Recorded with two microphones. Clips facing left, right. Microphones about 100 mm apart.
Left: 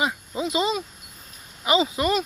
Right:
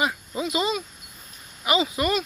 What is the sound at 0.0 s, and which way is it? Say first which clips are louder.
Speech: even; 20° left (ahead or behind).